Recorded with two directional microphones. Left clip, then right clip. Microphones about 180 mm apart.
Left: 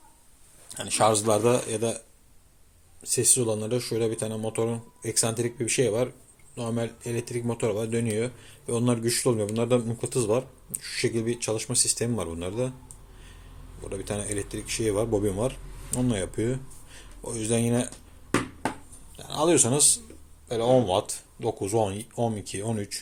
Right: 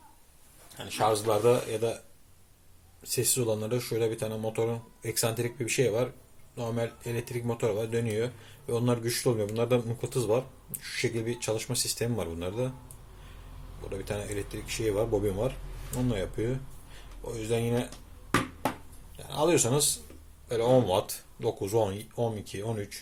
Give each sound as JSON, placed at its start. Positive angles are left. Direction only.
{"t": 0.8, "sound": "speech", "side_deg": 45}
{"t": 3.0, "sound": "speech", "side_deg": 20}
{"t": 13.9, "sound": "speech", "side_deg": 25}
{"t": 19.1, "sound": "a man's voice", "side_deg": 25}
{"t": 20.5, "sound": "speech", "side_deg": 15}